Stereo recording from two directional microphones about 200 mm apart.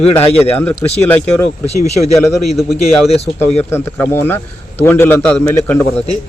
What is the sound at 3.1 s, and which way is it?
Speech, 30° left (ahead or behind).